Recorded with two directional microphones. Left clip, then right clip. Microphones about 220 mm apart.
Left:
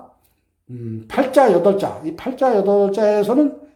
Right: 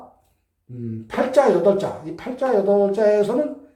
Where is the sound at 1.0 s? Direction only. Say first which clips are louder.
Left 3 dB; 50° left (ahead or behind).